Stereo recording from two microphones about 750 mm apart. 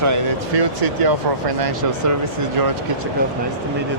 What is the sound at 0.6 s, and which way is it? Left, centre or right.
Speech, right.